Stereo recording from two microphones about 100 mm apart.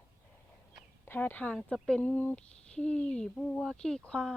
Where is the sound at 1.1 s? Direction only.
20° left (ahead or behind).